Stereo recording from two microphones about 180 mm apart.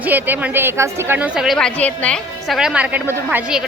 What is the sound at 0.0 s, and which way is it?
A woman's voice, 10° right (ahead or behind).